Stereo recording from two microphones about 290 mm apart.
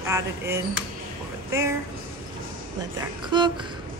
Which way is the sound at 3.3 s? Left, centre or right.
Centre.